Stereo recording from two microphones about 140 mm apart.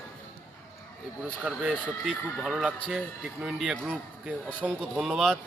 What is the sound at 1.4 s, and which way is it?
A man's voice, 10° right (ahead or behind).